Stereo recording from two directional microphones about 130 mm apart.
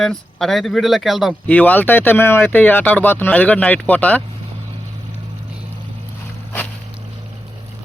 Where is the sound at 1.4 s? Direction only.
10° left (ahead or behind).